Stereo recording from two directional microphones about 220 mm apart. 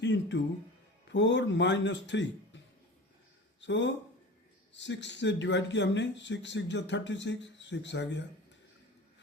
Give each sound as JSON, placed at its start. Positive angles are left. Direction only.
{"t": 0.0, "sound": "speech", "side_deg": 55}
{"t": 3.6, "sound": "speech", "side_deg": 55}